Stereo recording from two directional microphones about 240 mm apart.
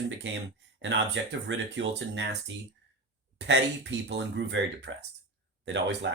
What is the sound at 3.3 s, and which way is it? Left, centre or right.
Speech, right.